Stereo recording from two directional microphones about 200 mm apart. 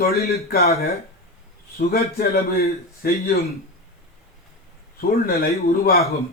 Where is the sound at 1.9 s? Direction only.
50° left (ahead or behind).